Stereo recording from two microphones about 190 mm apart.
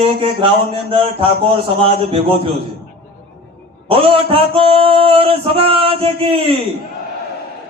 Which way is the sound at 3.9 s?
30° right (ahead or behind).